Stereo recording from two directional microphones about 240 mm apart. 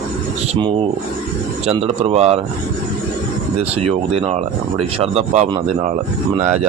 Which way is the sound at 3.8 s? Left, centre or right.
Right.